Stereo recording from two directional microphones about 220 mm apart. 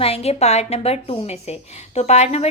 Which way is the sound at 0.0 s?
25° left (ahead or behind).